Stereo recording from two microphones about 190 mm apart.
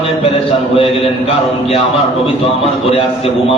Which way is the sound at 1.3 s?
30° left (ahead or behind).